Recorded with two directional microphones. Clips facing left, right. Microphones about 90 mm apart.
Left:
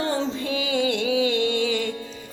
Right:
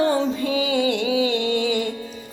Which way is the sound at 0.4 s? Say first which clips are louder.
Right 4 dB; 35° right (ahead or behind).